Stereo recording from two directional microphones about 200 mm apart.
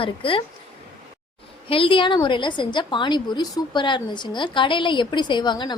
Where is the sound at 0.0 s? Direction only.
25° left (ahead or behind).